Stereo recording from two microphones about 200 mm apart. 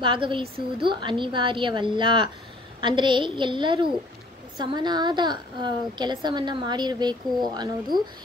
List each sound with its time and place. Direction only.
0.0 s a woman's voice: 25° right (ahead or behind)